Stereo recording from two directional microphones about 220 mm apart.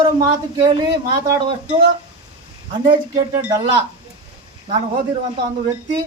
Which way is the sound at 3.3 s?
15° right (ahead or behind).